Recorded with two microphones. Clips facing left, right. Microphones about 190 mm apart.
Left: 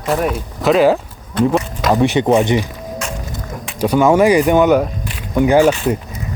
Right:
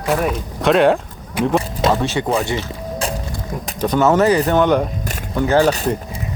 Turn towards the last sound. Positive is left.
turn(degrees=-40)  # may be behind; listen again after turning